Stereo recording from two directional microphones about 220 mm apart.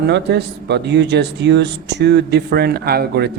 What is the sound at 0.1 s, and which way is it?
Speech, 50° right (ahead or behind).